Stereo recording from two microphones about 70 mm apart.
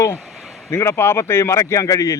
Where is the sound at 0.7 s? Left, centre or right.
Left.